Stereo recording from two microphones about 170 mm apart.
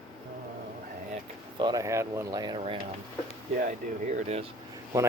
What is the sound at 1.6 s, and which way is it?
Speech, 20° right (ahead or behind).